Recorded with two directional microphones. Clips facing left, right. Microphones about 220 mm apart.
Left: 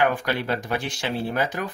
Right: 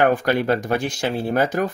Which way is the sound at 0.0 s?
45° right (ahead or behind).